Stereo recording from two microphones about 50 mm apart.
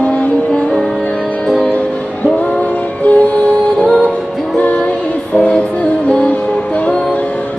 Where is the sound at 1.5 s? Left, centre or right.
Left.